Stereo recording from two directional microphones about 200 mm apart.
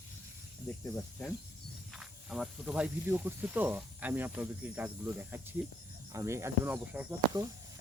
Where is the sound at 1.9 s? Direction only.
Centre (ahead or behind).